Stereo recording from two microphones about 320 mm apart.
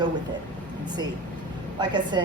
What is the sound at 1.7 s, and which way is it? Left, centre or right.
Speech, centre.